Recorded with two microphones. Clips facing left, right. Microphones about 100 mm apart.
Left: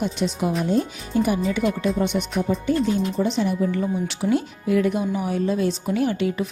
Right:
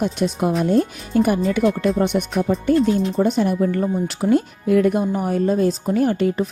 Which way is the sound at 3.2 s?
50° right (ahead or behind).